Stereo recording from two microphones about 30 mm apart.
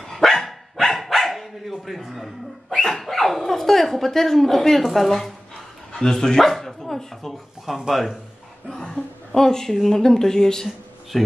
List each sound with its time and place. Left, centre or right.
0.0 s dog: centre
4.9 s speech: centre
8.6 s speech: centre
11.1 s speech: centre